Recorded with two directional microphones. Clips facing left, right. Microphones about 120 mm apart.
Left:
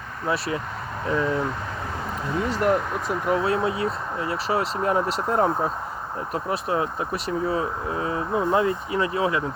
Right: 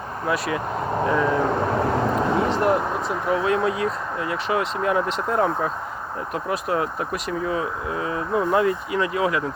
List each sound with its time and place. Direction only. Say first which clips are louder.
0.3 s speech: right 1 dB; 30° left (ahead or behind)
0.9 s speech: right 3 dB; 35° right (ahead or behind)
1.5 s vehicle: right 11 dB; 55° right (ahead or behind)
2.5 s speech: right 2 dB; 40° right (ahead or behind)
3.4 s speech: right 2 dB; 30° left (ahead or behind)